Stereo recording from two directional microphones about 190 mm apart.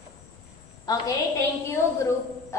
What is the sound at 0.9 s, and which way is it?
Speech, 20° left (ahead or behind).